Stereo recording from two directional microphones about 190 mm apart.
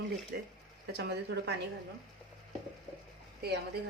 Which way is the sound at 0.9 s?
60° right (ahead or behind).